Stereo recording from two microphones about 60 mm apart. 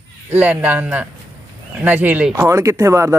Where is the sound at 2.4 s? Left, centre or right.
Right.